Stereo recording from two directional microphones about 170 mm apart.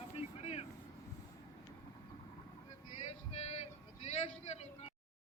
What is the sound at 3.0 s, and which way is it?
Male singing, 40° left (ahead or behind).